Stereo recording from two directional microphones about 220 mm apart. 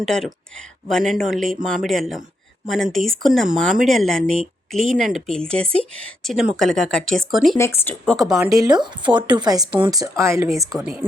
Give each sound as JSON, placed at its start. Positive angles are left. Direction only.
{"t": 0.0, "sound": "speech", "side_deg": 0}
{"t": 7.5, "sound": "speech", "side_deg": 10}
{"t": 8.4, "sound": "speech", "side_deg": -15}